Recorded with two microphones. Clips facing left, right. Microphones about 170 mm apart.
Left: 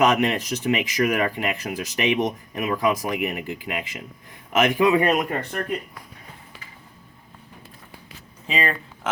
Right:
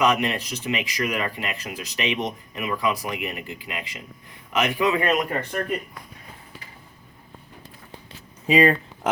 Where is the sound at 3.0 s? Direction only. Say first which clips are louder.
Left 4 dB; 55° left (ahead or behind).